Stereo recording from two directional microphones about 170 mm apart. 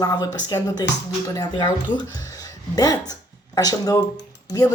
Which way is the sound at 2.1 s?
20° left (ahead or behind).